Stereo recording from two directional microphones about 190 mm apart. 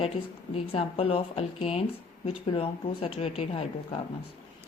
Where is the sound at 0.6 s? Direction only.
30° left (ahead or behind).